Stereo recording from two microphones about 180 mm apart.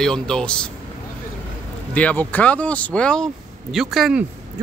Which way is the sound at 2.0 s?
10° left (ahead or behind).